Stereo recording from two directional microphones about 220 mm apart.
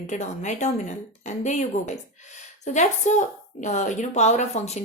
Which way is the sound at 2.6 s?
35° left (ahead or behind).